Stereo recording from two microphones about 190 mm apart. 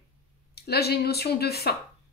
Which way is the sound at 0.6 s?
55° left (ahead or behind).